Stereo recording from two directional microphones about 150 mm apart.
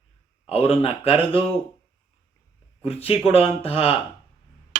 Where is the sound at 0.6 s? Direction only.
40° left (ahead or behind).